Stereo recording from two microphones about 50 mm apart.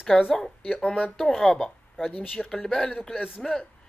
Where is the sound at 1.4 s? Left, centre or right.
Centre.